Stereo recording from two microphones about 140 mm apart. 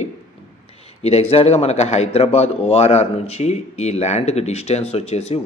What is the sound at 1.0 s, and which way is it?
A man's voice, 50° left (ahead or behind).